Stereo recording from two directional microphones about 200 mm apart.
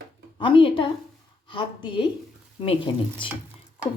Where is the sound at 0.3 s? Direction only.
25° left (ahead or behind).